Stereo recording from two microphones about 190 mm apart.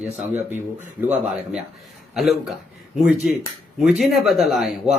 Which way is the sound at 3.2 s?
5° right (ahead or behind).